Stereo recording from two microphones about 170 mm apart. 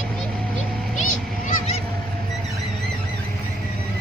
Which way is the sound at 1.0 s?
45° left (ahead or behind).